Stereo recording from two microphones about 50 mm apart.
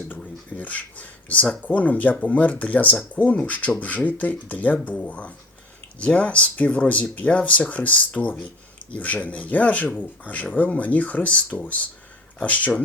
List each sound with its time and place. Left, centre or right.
0.5 s speech: left
12.4 s speech: left